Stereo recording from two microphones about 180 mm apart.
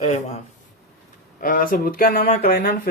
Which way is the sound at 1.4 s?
50° left (ahead or behind).